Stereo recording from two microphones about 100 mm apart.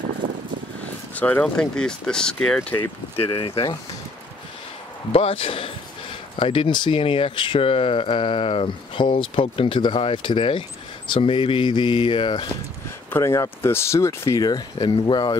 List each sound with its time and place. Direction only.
0.2 s vehicle: 55° right (ahead or behind)
1.1 s speech: 15° left (ahead or behind)
3.3 s speech: 60° left (ahead or behind)
5.1 s speech: 65° left (ahead or behind)
11.3 s mantra: 50° left (ahead or behind)
13.1 s speech: 30° left (ahead or behind)
14.8 s mantra: 55° left (ahead or behind)